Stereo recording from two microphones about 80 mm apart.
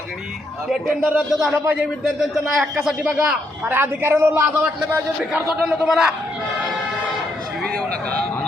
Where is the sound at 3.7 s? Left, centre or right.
Right.